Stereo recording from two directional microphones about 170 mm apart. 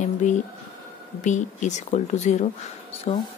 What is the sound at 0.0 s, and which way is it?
Speech, 45° left (ahead or behind).